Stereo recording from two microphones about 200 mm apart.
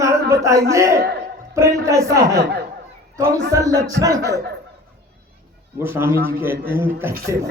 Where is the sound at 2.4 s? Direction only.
55° right (ahead or behind).